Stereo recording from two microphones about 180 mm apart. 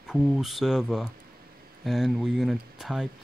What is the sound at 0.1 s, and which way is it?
Speech, centre (ahead or behind).